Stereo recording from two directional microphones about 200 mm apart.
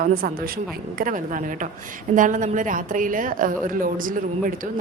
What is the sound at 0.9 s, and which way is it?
A woman's voice, 40° right (ahead or behind).